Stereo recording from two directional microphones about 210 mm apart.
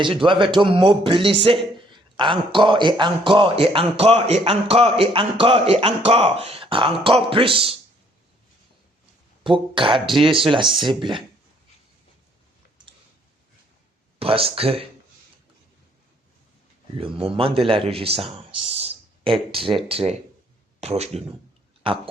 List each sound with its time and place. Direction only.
0.3 s a man's voice: 25° right (ahead or behind)
9.4 s a man's voice: 25° right (ahead or behind)
14.2 s a man's voice: 25° right (ahead or behind)
17.0 s a man's voice: 25° right (ahead or behind)